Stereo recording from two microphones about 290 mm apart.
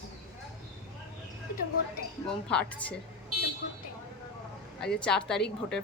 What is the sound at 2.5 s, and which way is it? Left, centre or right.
Speech, centre.